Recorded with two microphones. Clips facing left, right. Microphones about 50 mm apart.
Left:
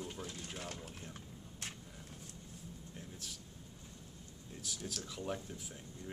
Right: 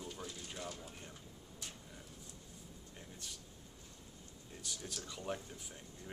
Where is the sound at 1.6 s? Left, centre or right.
Left.